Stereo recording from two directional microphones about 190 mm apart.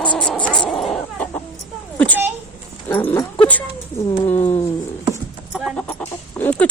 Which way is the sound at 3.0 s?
10° left (ahead or behind).